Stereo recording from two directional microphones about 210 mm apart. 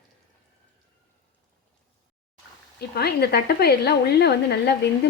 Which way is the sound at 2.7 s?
50° left (ahead or behind).